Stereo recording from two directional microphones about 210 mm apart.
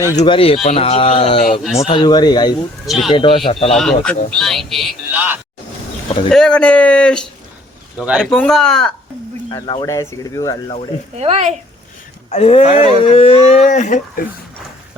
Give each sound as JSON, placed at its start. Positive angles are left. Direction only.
{"t": 0.2, "sound": "speech", "side_deg": 25}
{"t": 2.8, "sound": "speech", "side_deg": 0}
{"t": 3.1, "sound": "speech", "side_deg": 25}
{"t": 3.7, "sound": "speech", "side_deg": 0}
{"t": 6.3, "sound": "speech", "side_deg": 5}
{"t": 9.5, "sound": "speech", "side_deg": 20}
{"t": 11.2, "sound": "speech", "side_deg": -30}
{"t": 12.3, "sound": "speech", "side_deg": 30}